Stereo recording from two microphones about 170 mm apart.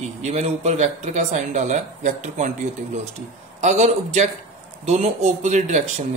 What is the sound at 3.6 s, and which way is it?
Speech, 45° right (ahead or behind).